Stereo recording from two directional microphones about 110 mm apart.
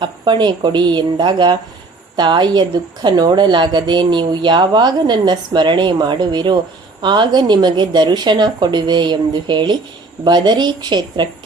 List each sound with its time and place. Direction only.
0.0 s a woman's voice: 45° right (ahead or behind)